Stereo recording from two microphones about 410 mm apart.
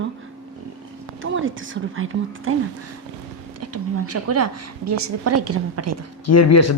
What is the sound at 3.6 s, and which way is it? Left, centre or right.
A woman's voice, right.